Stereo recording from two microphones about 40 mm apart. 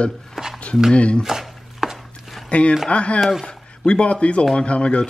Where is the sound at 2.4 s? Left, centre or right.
Left.